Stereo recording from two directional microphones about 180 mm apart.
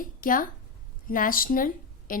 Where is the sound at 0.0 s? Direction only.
50° left (ahead or behind).